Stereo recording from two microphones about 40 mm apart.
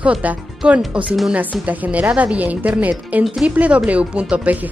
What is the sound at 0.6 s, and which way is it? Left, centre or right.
Speech, right.